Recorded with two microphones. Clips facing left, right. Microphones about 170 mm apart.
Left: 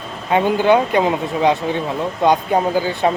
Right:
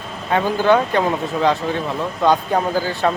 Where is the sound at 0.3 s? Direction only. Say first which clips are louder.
Left 2 dB; 15° left (ahead or behind).